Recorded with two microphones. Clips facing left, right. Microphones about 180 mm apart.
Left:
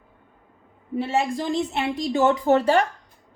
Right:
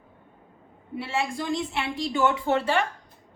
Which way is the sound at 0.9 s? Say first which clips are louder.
Left 5 dB; 40° left (ahead or behind).